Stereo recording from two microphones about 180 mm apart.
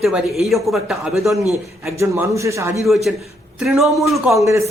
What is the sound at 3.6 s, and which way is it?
Speech, centre (ahead or behind).